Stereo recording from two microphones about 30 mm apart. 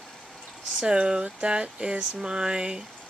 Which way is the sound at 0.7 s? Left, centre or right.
Right.